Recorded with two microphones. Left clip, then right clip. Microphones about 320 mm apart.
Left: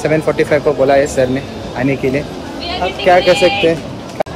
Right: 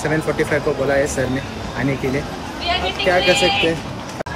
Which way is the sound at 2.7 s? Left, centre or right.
Centre.